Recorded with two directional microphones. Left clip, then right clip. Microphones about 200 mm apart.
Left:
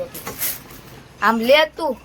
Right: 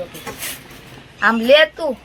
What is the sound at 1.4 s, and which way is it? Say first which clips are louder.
Speech: right 4 dB; 20° left (ahead or behind).